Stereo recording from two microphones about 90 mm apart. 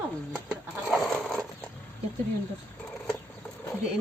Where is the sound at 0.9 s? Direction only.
Centre (ahead or behind).